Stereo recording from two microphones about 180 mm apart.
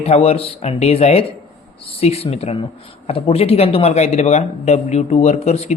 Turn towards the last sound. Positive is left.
turn(degrees=35)  # may be behind; listen again after turning